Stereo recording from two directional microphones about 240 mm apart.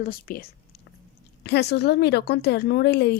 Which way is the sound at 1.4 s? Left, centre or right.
Left.